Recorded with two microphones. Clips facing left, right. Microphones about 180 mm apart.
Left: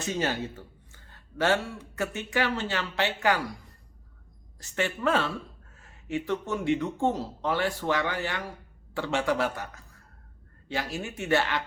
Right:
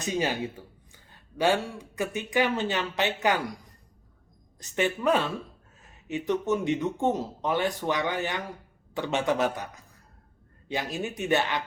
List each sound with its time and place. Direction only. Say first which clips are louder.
0.0 s speech: right 1 dB; 15° right (ahead or behind)
4.6 s speech: right 2 dB; 20° right (ahead or behind)